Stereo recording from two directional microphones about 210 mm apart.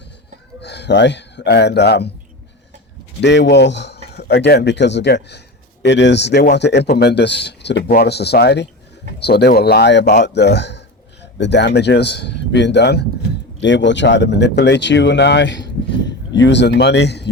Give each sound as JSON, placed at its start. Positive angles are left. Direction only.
{"t": 0.6, "sound": "speech", "side_deg": 55}
{"t": 3.2, "sound": "speech", "side_deg": 55}